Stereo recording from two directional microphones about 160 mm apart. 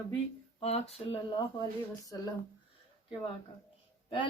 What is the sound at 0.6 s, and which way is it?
Speech, 40° left (ahead or behind).